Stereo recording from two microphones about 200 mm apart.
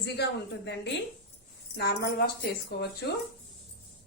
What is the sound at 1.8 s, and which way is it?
A woman's voice, 55° left (ahead or behind).